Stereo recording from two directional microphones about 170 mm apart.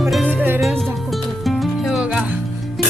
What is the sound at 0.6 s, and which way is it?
Music, centre (ahead or behind).